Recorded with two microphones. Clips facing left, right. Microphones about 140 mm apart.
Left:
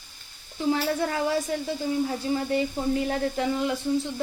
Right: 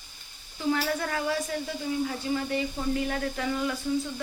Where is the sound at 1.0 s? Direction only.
25° left (ahead or behind).